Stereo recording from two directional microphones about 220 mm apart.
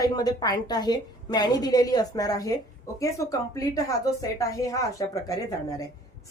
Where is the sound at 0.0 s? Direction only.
15° left (ahead or behind).